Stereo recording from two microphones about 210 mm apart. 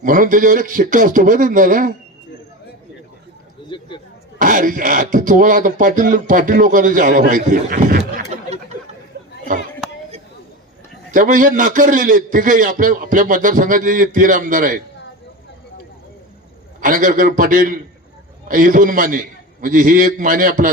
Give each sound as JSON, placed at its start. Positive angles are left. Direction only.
{"t": 0.0, "sound": "speech", "side_deg": -40}
{"t": 3.7, "sound": "a sound", "side_deg": 25}
{"t": 4.4, "sound": "speech", "side_deg": -40}
{"t": 9.1, "sound": "chatter", "side_deg": -50}
{"t": 11.1, "sound": "speech", "side_deg": -40}
{"t": 16.8, "sound": "speech", "side_deg": -40}